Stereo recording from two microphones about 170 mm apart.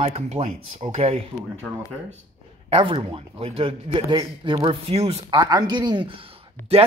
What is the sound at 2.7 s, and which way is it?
A man's voice, 30° right (ahead or behind).